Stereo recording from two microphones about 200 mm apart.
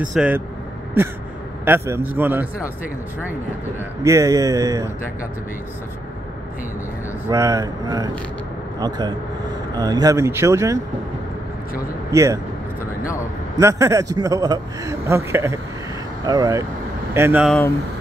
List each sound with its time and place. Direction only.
0.1 s speech: 5° right (ahead or behind)
1.6 s a man's voice: 10° right (ahead or behind)
4.0 s a man's voice: 15° right (ahead or behind)
7.2 s a man's voice: 15° right (ahead or behind)
12.1 s speech: 15° right (ahead or behind)
13.6 s a man's voice: 15° right (ahead or behind)
17.5 s speech: 10° left (ahead or behind)